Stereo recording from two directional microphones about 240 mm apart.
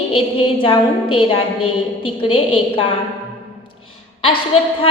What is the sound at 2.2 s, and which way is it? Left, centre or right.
Speech, left.